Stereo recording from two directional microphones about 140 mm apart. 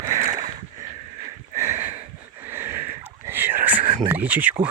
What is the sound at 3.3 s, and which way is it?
Whispering, 15° right (ahead or behind).